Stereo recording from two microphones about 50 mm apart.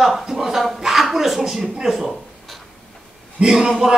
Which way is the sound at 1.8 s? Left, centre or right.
Centre.